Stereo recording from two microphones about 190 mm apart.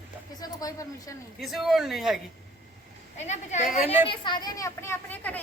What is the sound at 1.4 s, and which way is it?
Speech, centre (ahead or behind).